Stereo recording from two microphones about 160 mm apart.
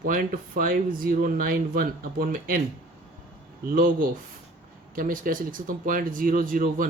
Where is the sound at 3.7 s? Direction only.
65° right (ahead or behind).